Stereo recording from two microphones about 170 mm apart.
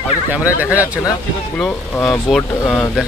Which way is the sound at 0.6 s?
10° right (ahead or behind).